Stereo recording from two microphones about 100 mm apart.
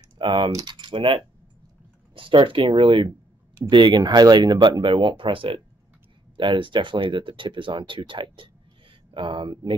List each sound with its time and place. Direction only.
0.2 s speech: 55° right (ahead or behind)